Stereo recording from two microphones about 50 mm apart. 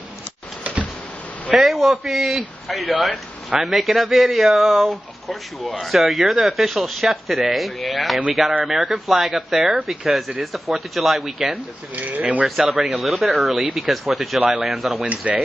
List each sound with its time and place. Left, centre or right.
1.6 s speech: centre
11.9 s speech: right
12.4 s speech: centre
15.0 s speech: right